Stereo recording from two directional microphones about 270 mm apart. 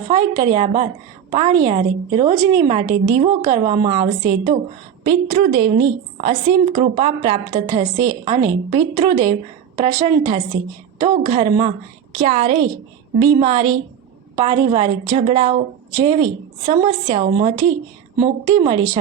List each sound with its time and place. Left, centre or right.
0.1 s a woman's voice: centre
18.6 s a woman's voice: centre